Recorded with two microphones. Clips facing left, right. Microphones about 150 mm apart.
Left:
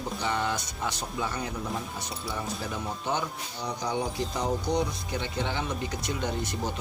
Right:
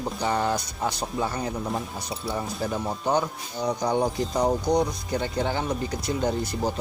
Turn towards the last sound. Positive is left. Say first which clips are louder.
# right 5 dB
turn(degrees=-35)  # may be behind; listen again after turning